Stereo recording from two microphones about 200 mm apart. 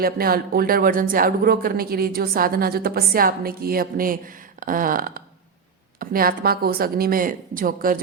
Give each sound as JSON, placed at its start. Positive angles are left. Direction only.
{"t": 0.0, "sound": "speech", "side_deg": -50}